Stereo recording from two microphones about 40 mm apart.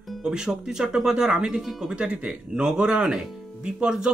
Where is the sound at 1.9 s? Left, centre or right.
Right.